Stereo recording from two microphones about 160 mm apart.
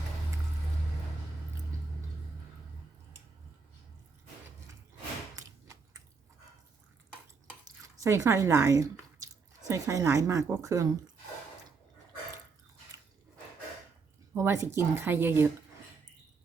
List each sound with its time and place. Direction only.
5.4 s a sound: 20° right (ahead or behind)
8.0 s speech: 20° right (ahead or behind)
14.3 s a woman's voice: 15° right (ahead or behind)